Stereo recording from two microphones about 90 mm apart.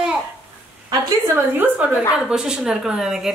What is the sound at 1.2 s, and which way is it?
Speech, 30° right (ahead or behind).